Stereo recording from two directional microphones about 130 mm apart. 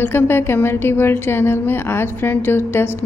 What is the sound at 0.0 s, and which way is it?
A woman's voice, 15° left (ahead or behind).